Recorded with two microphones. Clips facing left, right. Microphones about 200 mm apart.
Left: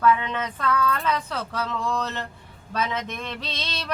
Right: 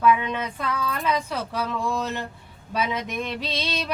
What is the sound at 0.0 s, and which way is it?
A woman's voice, 10° right (ahead or behind).